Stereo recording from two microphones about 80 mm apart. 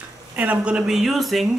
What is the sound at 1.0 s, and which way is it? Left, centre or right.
Speech, centre.